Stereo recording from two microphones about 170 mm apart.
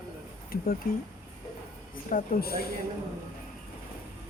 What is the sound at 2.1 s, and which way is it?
Speech, 55° left (ahead or behind).